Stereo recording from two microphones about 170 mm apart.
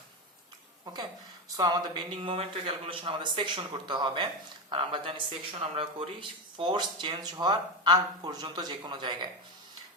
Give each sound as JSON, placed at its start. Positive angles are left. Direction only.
{"t": 1.5, "sound": "speech", "side_deg": -25}